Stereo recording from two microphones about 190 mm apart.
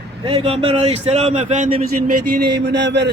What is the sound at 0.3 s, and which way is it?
Speech, 30° right (ahead or behind).